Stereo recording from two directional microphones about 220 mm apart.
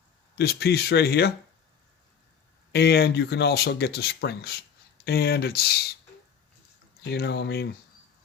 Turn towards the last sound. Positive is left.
turn(degrees=50)  # may be behind; listen again after turning